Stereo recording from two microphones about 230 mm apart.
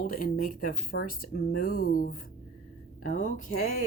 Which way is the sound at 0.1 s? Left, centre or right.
Left.